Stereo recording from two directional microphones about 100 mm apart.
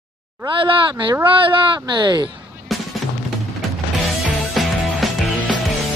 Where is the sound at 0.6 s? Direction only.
55° right (ahead or behind).